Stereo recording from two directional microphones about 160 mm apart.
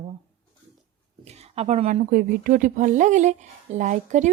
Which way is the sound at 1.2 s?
40° right (ahead or behind).